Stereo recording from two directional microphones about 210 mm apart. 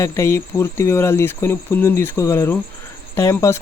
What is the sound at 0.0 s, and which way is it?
Cricket, 15° left (ahead or behind).